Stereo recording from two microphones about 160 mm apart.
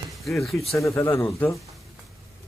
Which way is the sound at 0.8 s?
15° left (ahead or behind).